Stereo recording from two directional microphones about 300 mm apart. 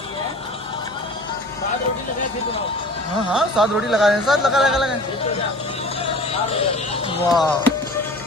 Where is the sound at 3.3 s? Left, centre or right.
Centre.